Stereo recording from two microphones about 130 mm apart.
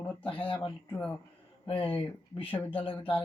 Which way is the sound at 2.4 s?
15° left (ahead or behind).